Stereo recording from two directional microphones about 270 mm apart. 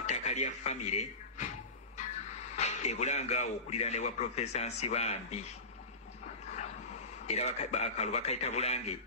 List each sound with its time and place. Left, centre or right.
0.0 s speech: left
2.5 s a man's voice: left
7.2 s a man's voice: left